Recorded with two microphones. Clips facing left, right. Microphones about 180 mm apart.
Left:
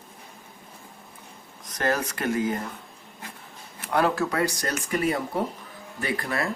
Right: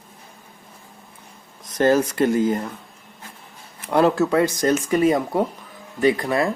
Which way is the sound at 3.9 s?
25° right (ahead or behind).